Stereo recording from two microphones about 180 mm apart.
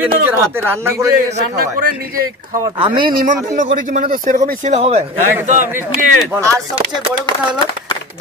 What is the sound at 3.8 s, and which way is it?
Speech, 45° right (ahead or behind).